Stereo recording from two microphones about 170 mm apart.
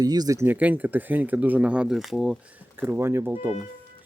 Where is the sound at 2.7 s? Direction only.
15° right (ahead or behind).